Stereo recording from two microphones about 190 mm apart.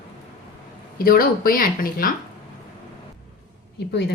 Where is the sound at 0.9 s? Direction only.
50° left (ahead or behind).